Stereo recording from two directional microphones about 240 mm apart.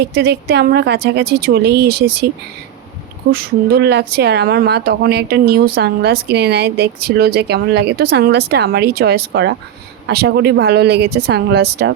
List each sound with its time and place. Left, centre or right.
0.0 s speech: right
3.3 s speech: right